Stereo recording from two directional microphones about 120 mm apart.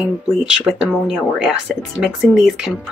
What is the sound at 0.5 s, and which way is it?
Speech, 5° right (ahead or behind).